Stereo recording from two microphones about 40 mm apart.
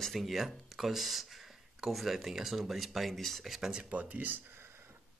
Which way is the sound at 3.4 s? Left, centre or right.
Centre.